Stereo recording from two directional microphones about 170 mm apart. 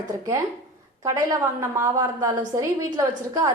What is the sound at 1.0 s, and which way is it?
A woman's voice, 20° right (ahead or behind).